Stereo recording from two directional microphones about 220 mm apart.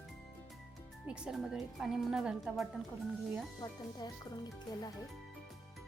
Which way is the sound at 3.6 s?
20° left (ahead or behind).